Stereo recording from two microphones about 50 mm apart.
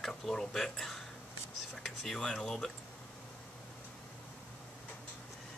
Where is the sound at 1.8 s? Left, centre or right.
Centre.